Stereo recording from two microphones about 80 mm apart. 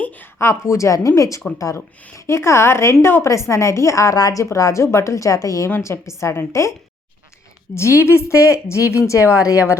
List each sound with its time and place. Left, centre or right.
0.3 s a woman's voice: left
7.8 s a woman's voice: left